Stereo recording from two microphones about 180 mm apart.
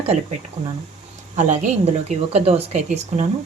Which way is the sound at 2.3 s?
35° right (ahead or behind).